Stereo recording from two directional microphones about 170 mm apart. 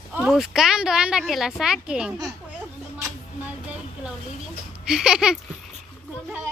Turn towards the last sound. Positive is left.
turn(degrees=-5)  # may be behind; listen again after turning